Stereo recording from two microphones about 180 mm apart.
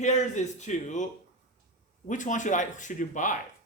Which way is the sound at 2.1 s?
45° left (ahead or behind).